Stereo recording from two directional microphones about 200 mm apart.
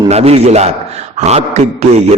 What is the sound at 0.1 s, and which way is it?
A man's voice, 30° right (ahead or behind).